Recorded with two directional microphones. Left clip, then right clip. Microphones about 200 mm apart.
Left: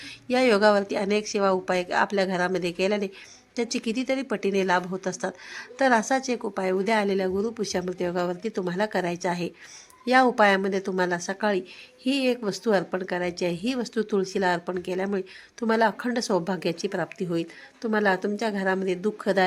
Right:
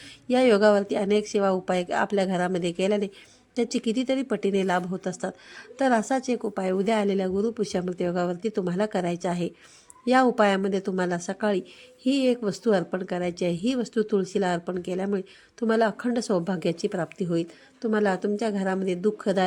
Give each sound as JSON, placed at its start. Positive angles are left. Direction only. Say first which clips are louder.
{"t": 0.3, "sound": "speech", "louder": "right 1 dB", "side_deg": -35}